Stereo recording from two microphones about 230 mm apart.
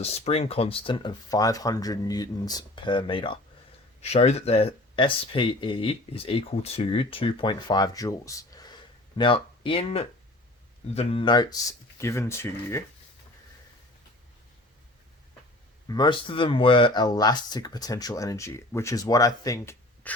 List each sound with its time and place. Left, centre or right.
0.0 s speech: left; by 12.8 s centre
15.9 s speech: centre